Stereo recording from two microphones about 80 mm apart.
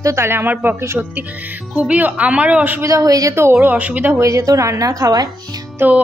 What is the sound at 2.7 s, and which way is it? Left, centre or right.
Speech, right.